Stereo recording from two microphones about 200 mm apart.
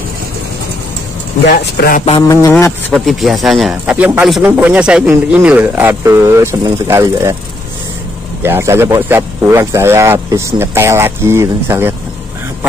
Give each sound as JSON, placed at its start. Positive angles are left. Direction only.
{"t": 1.5, "sound": "speech", "side_deg": 45}
{"t": 2.0, "sound": "a sound", "side_deg": 20}
{"t": 2.5, "sound": "speech", "side_deg": 5}
{"t": 8.4, "sound": "speech", "side_deg": -10}